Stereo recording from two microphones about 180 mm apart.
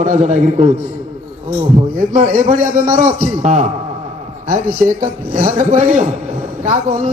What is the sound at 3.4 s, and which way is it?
Speech, 40° right (ahead or behind).